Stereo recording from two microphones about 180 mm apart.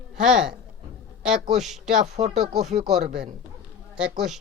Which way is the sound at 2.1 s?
40° right (ahead or behind).